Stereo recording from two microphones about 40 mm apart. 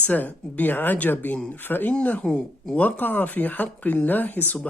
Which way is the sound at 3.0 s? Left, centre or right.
Left.